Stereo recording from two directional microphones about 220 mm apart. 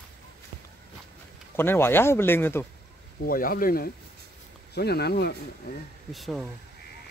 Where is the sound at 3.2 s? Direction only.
40° left (ahead or behind).